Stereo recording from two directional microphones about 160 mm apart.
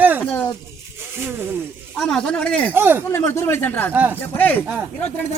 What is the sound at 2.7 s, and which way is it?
Speech, 10° right (ahead or behind).